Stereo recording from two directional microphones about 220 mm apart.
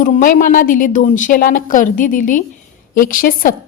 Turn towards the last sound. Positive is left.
turn(degrees=40)  # may be behind; listen again after turning